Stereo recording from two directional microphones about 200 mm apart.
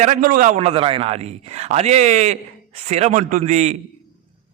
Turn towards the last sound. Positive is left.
turn(degrees=-35)  # may be behind; listen again after turning